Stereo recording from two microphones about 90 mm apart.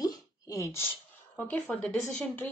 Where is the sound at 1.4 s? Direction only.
15° left (ahead or behind).